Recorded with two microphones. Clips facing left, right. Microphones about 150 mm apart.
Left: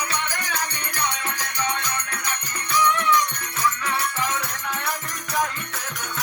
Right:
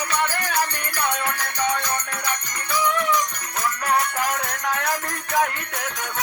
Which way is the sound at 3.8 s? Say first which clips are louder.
Right 4 dB; 45° right (ahead or behind).